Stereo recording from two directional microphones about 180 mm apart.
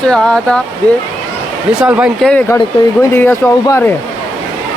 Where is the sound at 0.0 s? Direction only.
5° left (ahead or behind).